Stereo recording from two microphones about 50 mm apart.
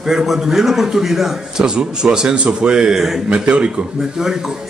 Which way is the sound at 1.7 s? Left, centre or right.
Centre.